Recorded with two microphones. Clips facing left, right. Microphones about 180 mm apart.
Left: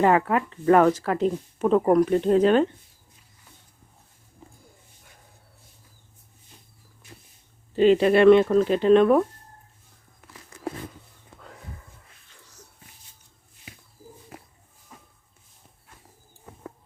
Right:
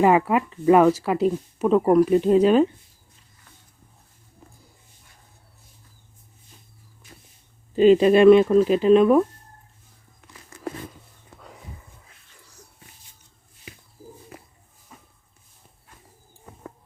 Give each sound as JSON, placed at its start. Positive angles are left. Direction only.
{"t": 0.0, "sound": "speech", "side_deg": -10}
{"t": 7.8, "sound": "speech", "side_deg": -15}
{"t": 12.0, "sound": "dog", "side_deg": -10}